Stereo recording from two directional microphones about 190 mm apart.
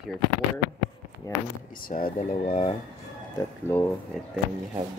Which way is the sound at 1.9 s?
40° left (ahead or behind).